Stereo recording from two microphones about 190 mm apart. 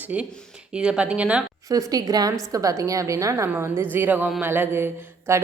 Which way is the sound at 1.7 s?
20° right (ahead or behind).